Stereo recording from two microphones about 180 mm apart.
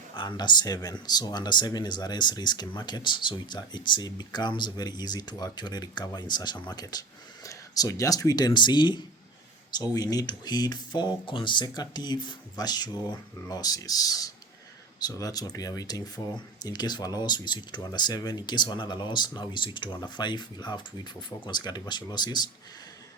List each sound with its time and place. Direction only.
0.2 s speech: 25° left (ahead or behind)